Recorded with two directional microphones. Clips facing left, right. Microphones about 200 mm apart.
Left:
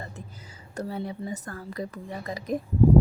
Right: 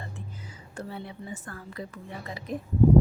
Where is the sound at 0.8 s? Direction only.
40° left (ahead or behind).